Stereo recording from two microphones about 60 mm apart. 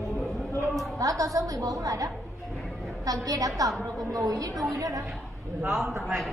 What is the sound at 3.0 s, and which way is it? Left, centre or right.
A woman's voice, right.